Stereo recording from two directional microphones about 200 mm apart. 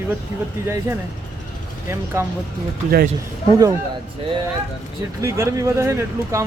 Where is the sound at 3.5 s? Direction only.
15° right (ahead or behind).